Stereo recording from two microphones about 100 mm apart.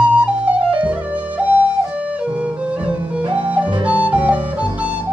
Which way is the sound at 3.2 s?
55° right (ahead or behind).